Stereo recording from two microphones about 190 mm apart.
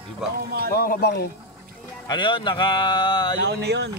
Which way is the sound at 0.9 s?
60° left (ahead or behind).